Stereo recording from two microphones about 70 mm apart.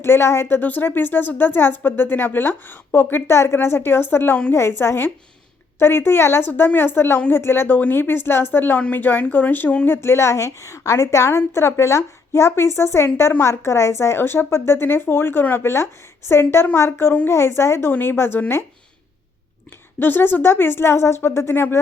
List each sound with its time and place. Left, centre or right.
0.0 s speech: left
0.6 s speech: left
6.5 s a woman's voice: left
20.0 s speech: left